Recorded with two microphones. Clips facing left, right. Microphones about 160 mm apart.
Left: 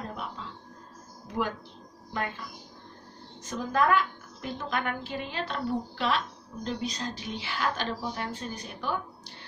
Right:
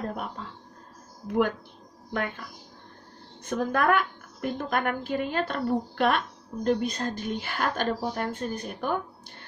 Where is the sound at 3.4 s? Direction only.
55° right (ahead or behind).